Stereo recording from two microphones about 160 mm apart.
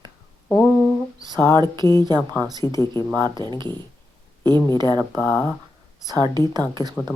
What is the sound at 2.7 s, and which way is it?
Speech, 20° left (ahead or behind).